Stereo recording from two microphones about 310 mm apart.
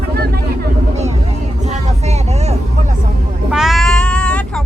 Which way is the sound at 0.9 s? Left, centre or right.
Right.